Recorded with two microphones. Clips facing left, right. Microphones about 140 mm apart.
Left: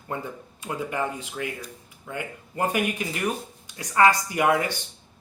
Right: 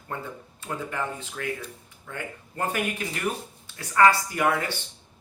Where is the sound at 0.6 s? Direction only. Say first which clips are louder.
Left 3 dB; 15° left (ahead or behind).